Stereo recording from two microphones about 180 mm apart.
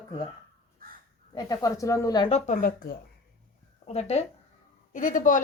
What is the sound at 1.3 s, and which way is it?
A child's voice, 25° left (ahead or behind).